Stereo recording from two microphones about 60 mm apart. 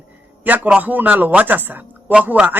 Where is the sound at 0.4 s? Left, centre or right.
Right.